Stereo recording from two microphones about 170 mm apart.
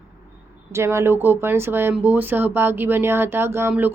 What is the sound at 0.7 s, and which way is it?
Speech, 15° right (ahead or behind).